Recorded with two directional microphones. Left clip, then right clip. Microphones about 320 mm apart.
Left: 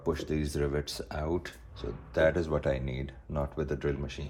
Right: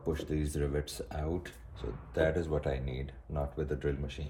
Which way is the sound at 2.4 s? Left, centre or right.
Left.